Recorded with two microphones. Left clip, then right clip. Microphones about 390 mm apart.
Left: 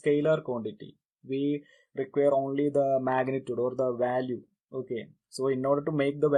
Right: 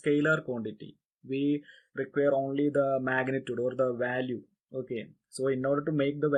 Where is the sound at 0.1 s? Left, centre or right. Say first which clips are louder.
Left 1 dB; left.